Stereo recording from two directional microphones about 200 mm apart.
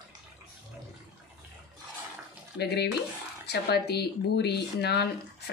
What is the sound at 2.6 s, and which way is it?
A woman's voice, 55° left (ahead or behind).